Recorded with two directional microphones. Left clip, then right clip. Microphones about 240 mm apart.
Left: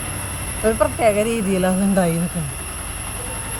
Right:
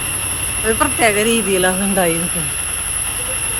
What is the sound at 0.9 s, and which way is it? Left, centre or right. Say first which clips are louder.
Speech: right 3 dB; left.